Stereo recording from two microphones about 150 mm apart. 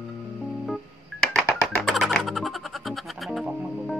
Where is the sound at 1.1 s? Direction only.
Centre (ahead or behind).